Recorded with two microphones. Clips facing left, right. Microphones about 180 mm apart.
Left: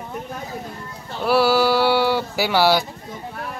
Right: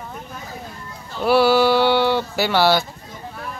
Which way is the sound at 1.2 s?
Centre (ahead or behind).